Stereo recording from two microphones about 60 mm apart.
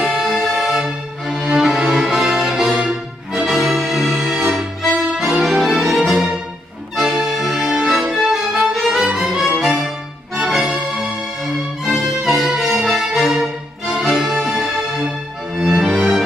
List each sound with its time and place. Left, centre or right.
0.0 s music: centre
0.3 s music: centre
3.4 s music: centre
14.3 s music: centre
15.5 s music: centre